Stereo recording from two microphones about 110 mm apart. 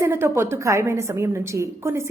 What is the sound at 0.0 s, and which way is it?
A woman's voice, 20° right (ahead or behind).